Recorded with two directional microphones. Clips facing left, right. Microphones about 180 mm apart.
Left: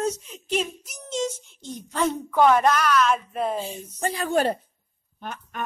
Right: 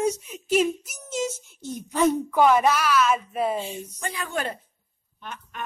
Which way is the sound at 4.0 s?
35° left (ahead or behind).